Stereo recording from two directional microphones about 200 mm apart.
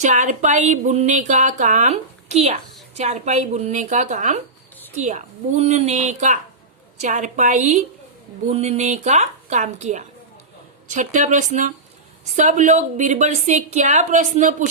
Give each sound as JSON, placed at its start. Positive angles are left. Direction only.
{"t": 0.0, "sound": "speech", "side_deg": -35}